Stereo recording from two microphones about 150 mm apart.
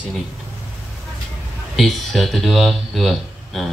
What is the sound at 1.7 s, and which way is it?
Speech, centre (ahead or behind).